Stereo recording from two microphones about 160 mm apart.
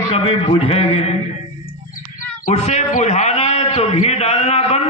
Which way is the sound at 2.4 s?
45° left (ahead or behind).